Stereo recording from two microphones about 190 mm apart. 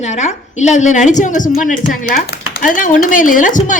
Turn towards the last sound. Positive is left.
turn(degrees=45)  # may be behind; listen again after turning